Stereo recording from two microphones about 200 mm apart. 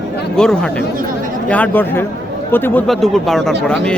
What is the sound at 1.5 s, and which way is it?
Speech, 10° left (ahead or behind).